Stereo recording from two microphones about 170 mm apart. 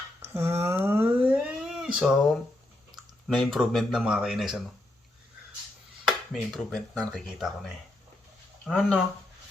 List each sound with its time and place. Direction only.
0.2 s cat: 15° right (ahead or behind)
2.9 s a sound: 25° right (ahead or behind)
3.2 s speech: centre (ahead or behind)
6.1 s speech: centre (ahead or behind)
8.7 s speech: 5° left (ahead or behind)